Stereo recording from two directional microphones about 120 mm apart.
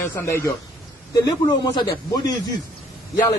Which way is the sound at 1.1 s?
35° left (ahead or behind).